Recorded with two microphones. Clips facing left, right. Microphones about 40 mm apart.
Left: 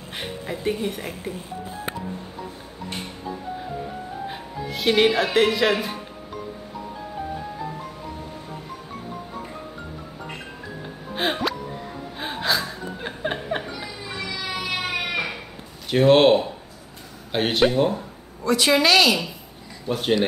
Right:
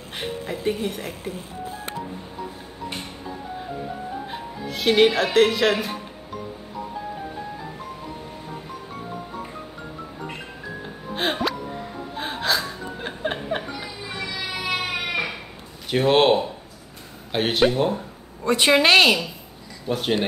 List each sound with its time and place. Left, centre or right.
0.1 s speech: centre
4.3 s speech: centre
11.1 s music: centre
12.2 s gasp: centre
14.5 s baby cry: centre
15.9 s speech: centre
18.4 s a woman's voice: right
19.9 s speech: centre